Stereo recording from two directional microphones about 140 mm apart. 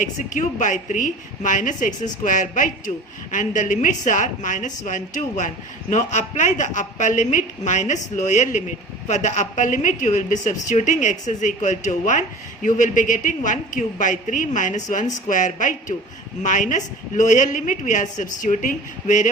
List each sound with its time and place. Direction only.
0.0 s a woman's voice: 65° left (ahead or behind)